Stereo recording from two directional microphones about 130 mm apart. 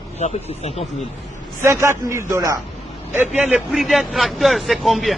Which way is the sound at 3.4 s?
10° right (ahead or behind).